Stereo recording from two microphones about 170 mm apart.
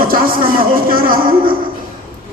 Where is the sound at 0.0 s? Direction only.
55° right (ahead or behind).